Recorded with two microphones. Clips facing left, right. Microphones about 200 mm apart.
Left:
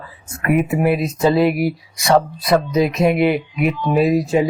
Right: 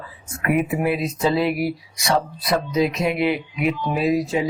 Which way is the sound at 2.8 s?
50° left (ahead or behind).